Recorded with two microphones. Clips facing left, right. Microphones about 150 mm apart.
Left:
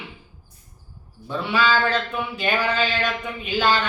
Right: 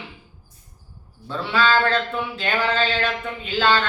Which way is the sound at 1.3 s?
15° left (ahead or behind).